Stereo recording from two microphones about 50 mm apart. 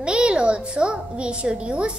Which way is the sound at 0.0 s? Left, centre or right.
Centre.